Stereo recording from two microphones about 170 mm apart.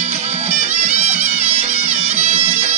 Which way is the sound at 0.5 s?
40° right (ahead or behind).